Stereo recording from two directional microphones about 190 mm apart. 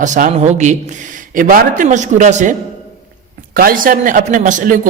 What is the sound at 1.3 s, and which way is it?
A man's voice, 45° right (ahead or behind).